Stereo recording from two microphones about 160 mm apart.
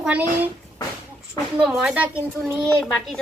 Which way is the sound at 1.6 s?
5° right (ahead or behind).